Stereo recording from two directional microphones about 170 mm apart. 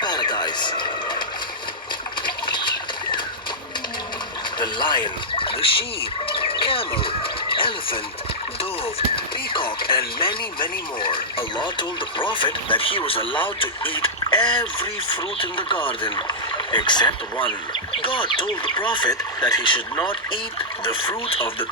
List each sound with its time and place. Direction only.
0.0 s a sound: 25° left (ahead or behind)
2.2 s water: 25° left (ahead or behind)
4.6 s speech: 25° left (ahead or behind)
6.3 s chicken: 30° left (ahead or behind)
9.1 s speech: 30° left (ahead or behind)